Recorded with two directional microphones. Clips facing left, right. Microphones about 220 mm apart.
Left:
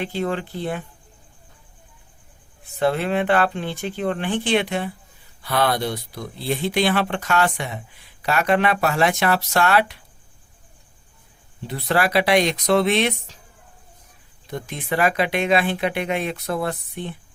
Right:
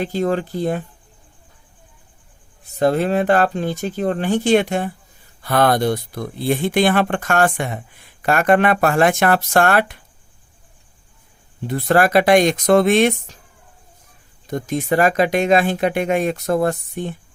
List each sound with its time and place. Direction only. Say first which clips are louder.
0.0 s speech: right 5 dB; 40° right (ahead or behind)
2.7 s speech: right 4 dB; 40° right (ahead or behind)
11.7 s speech: right 6 dB; 50° right (ahead or behind)
14.4 s speech: right 8 dB; 45° right (ahead or behind)